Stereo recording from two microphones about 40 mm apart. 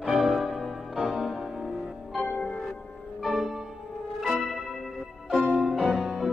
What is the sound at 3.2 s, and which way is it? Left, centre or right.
Music, centre.